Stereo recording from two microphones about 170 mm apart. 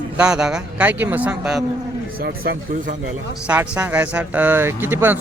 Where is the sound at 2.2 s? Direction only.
60° right (ahead or behind).